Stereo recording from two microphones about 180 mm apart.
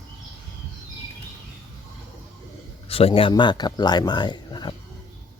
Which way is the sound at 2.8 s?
30° left (ahead or behind).